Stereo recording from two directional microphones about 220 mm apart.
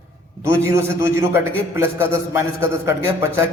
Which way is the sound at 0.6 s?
10° right (ahead or behind).